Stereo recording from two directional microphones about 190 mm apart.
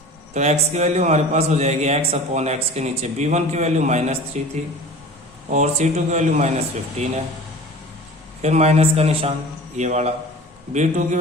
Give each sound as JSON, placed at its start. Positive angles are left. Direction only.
{"t": 0.3, "sound": "a man's voice", "side_deg": -35}
{"t": 8.4, "sound": "a man's voice", "side_deg": -35}